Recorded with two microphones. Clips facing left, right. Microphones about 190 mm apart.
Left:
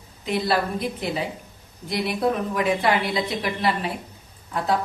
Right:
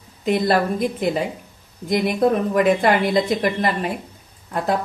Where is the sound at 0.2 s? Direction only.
50° right (ahead or behind).